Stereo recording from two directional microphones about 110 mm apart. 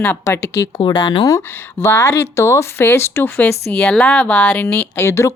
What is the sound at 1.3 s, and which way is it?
Speech, 30° left (ahead or behind).